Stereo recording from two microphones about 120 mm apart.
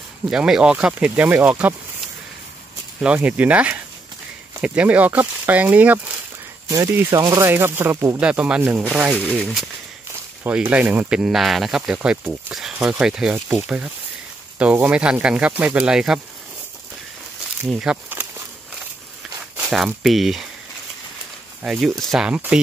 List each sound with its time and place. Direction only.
0.3 s speech: 5° right (ahead or behind)
3.0 s speech: 10° right (ahead or behind)
7.1 s speech: 30° right (ahead or behind)
8.2 s speech: 10° right (ahead or behind)
9.1 s speech: 10° left (ahead or behind)
10.4 s speech: 15° right (ahead or behind)
17.6 s speech: 5° right (ahead or behind)
19.7 s speech: 5° right (ahead or behind)
21.6 s speech: 5° right (ahead or behind)